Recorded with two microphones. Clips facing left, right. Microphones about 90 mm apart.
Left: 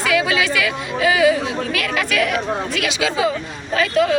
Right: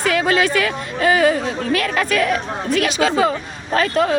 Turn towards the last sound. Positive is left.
turn(degrees=-40)  # may be behind; listen again after turning